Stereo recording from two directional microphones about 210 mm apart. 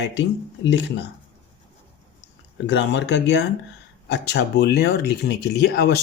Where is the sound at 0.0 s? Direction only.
60° left (ahead or behind).